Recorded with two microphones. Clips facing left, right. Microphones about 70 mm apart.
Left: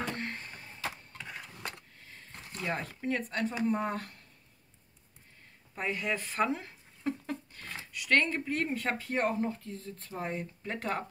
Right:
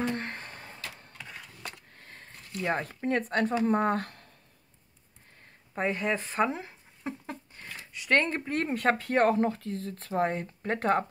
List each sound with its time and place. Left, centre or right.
0.1 s a sound: right
0.5 s power windows: right
2.0 s a sound: right
2.6 s speech: right
5.8 s speech: right
7.0 s a sound: centre
7.9 s speech: right
8.5 s speech: right
10.4 s speech: right